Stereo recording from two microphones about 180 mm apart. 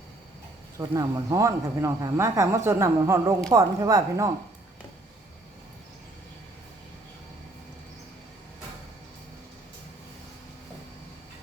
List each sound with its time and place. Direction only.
0.8 s speech: 20° right (ahead or behind)